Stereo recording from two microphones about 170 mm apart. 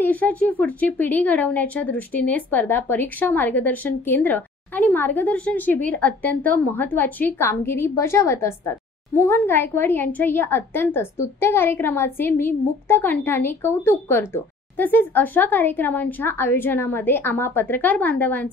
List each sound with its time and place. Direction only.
0.0 s speech: 10° left (ahead or behind)